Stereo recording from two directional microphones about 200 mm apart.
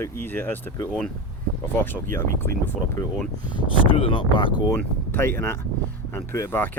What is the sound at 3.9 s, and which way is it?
Speech, 25° left (ahead or behind).